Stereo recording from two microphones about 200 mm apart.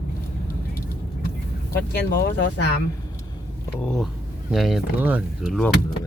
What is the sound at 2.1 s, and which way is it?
Speech, 55° left (ahead or behind).